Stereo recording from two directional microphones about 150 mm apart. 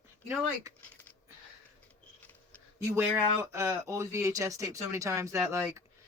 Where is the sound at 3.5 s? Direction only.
20° right (ahead or behind).